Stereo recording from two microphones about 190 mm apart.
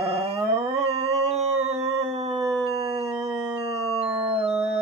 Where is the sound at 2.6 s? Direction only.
30° right (ahead or behind).